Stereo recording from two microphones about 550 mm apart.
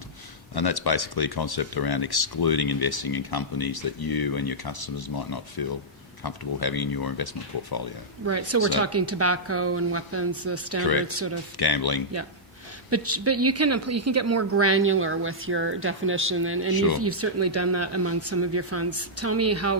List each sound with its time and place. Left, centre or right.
0.5 s speech: left
8.3 s speech: right
11.5 s speech: left
12.9 s speech: right
16.7 s speech: left
17.0 s speech: right